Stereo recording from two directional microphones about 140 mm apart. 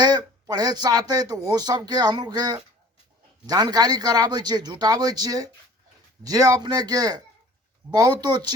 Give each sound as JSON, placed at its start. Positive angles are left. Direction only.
{"t": 0.0, "sound": "speech", "side_deg": -30}